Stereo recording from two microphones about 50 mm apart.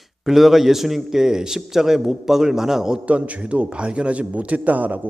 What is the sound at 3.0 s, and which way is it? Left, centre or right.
A man's voice, right.